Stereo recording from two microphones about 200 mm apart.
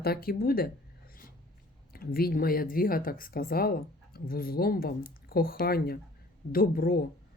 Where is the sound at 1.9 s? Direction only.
50° left (ahead or behind).